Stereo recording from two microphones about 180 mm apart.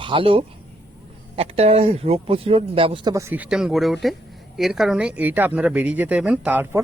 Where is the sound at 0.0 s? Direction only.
30° right (ahead or behind); by 6.8 s 10° right (ahead or behind).